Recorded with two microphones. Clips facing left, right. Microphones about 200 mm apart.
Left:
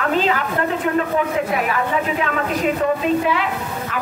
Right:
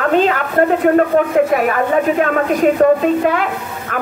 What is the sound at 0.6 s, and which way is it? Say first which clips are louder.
Speech: right 12 dB; 50° right (ahead or behind).